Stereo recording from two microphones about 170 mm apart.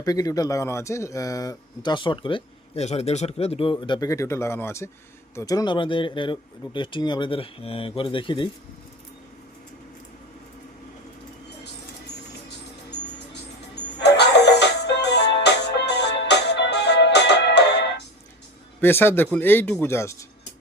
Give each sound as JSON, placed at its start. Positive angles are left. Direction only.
{"t": 0.0, "sound": "speech", "side_deg": 20}
{"t": 14.0, "sound": "music", "side_deg": 80}
{"t": 18.8, "sound": "speech", "side_deg": 15}